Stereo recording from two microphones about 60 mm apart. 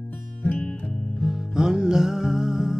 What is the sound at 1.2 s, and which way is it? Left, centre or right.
Music, centre.